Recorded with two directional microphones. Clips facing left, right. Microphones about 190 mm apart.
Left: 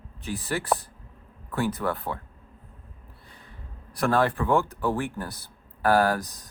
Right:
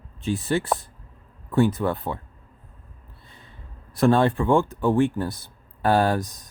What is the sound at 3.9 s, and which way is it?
Speech, 25° right (ahead or behind).